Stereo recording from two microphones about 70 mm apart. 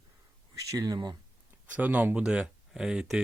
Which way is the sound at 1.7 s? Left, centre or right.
Right.